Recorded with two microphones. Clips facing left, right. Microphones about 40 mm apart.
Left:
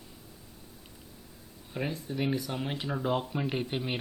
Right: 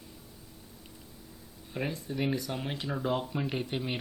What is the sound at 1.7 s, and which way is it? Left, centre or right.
Speech, centre.